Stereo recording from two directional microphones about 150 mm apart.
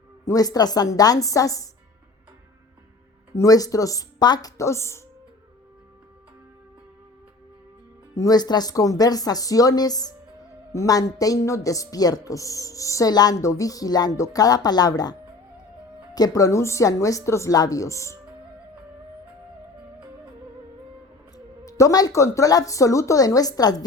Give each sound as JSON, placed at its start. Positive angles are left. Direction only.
{"t": 0.3, "sound": "a woman's voice", "side_deg": 25}
{"t": 3.3, "sound": "a woman's voice", "side_deg": 25}
{"t": 8.1, "sound": "a woman's voice", "side_deg": 25}
{"t": 16.1, "sound": "a woman's voice", "side_deg": 25}
{"t": 21.3, "sound": "a woman's voice", "side_deg": 20}